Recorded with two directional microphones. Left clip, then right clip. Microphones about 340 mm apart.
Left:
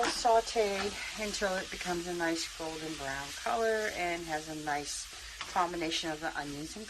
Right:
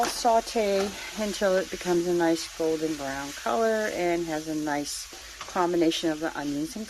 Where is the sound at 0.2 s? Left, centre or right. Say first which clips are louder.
Right 3 dB; right.